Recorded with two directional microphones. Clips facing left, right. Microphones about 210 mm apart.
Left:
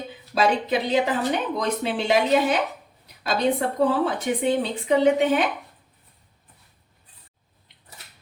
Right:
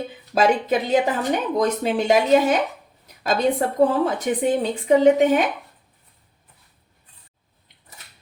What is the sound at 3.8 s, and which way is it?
Speech, 45° right (ahead or behind).